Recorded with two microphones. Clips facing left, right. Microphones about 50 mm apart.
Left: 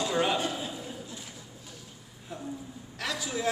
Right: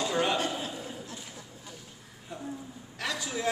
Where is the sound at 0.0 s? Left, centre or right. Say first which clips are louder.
Left 1 dB; centre.